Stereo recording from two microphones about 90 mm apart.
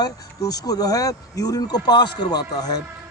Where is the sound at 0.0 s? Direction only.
45° left (ahead or behind).